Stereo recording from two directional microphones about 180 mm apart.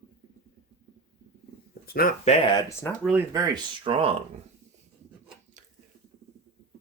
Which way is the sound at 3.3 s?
20° right (ahead or behind).